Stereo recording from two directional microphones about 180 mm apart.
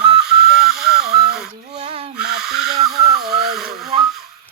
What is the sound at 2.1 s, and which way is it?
Owl, 5° right (ahead or behind).